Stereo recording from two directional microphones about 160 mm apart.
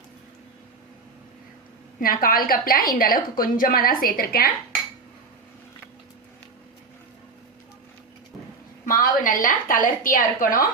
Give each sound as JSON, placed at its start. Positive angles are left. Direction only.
{"t": 2.0, "sound": "a woman's voice", "side_deg": 65}
{"t": 8.9, "sound": "a woman's voice", "side_deg": 60}